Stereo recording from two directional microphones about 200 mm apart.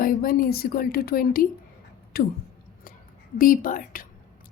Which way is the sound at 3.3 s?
45° left (ahead or behind).